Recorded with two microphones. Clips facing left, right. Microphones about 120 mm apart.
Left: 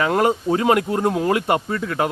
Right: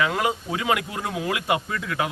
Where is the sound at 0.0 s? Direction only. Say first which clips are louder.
Left 6 dB; 45° left (ahead or behind).